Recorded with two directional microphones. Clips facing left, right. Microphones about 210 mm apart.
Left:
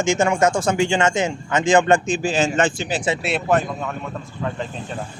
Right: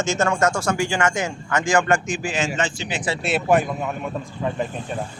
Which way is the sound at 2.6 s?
55° left (ahead or behind).